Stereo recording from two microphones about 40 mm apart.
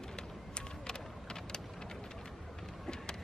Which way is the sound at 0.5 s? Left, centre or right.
Centre.